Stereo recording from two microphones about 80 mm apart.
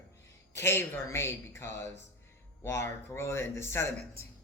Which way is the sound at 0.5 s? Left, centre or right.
Left.